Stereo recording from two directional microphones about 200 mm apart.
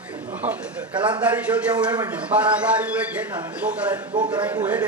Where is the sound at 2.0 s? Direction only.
5° right (ahead or behind).